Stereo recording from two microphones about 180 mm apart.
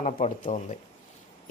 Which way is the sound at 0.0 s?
40° left (ahead or behind).